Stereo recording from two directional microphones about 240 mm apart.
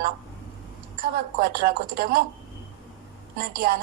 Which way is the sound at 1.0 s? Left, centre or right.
Right.